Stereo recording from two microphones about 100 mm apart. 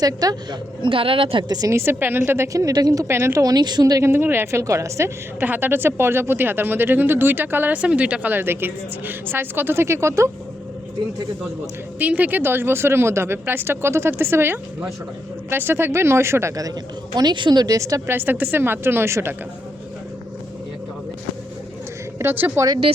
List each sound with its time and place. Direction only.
0.0 s speech: 40° right (ahead or behind)
0.8 s speech: 60° right (ahead or behind)
1.5 s speech: 40° right (ahead or behind)
1.7 s a woman's voice: 25° right (ahead or behind)
3.4 s speech: 45° right (ahead or behind)
4.0 s a woman's voice: 25° right (ahead or behind)
11.9 s a woman's voice: 15° right (ahead or behind); by 16.7 s 30° right (ahead or behind)
17.2 s a woman's voice: 50° right (ahead or behind); by 19.3 s 25° right (ahead or behind)
22.2 s a woman's voice: 20° right (ahead or behind)